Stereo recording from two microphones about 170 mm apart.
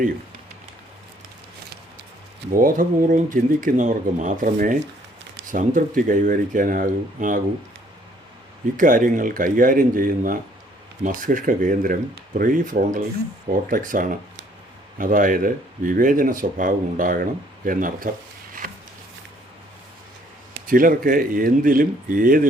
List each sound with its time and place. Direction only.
2.5 s speech: 55° right (ahead or behind)
8.8 s speech: 50° right (ahead or behind)
20.7 s speech: 55° right (ahead or behind)